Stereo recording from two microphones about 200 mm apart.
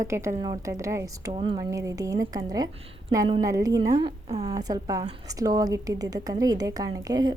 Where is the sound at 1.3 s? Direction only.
25° right (ahead or behind).